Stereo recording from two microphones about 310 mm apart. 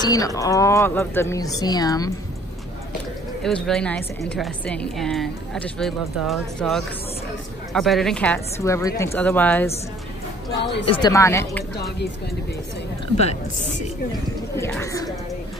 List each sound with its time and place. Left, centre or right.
0.0 s speech: centre
3.4 s a woman's voice: centre
10.6 s a woman's voice: left
10.9 s speech: centre
14.6 s speech: centre